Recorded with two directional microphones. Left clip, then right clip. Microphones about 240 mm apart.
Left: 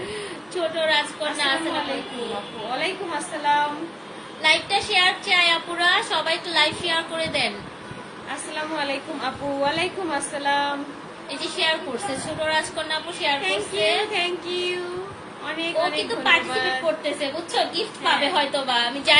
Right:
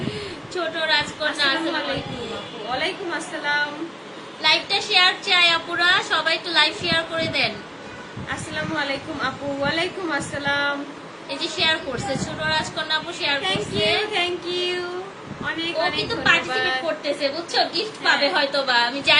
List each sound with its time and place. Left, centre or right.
0.9 s a woman's voice: centre
4.4 s a woman's voice: centre
8.5 s a woman's voice: centre